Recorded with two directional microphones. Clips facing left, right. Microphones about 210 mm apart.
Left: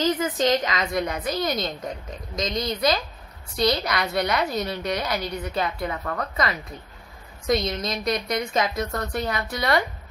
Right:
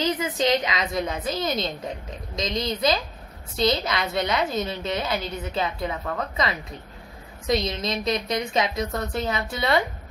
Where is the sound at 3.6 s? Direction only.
25° right (ahead or behind).